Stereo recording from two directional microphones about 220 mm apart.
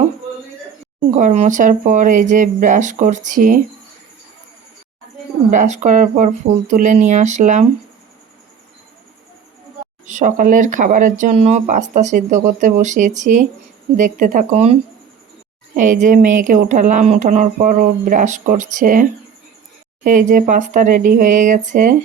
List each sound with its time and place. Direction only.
1.1 s speech: 30° right (ahead or behind)
5.5 s speech: 35° right (ahead or behind)
10.1 s speech: 35° right (ahead or behind)
20.1 s speech: 35° right (ahead or behind)